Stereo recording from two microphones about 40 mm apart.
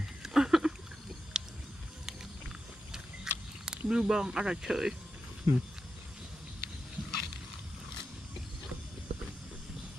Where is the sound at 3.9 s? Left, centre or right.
Centre.